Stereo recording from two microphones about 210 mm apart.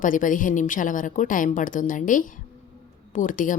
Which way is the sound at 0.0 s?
40° left (ahead or behind).